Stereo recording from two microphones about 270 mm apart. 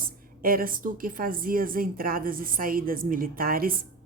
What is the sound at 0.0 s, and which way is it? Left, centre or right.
A woman's voice, right.